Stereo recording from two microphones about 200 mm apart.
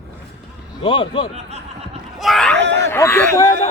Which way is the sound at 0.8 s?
25° left (ahead or behind).